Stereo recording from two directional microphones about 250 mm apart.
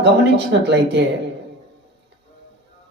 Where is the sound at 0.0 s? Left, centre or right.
Right.